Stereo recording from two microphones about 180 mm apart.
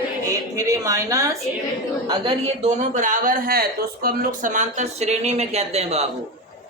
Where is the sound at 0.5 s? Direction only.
20° right (ahead or behind).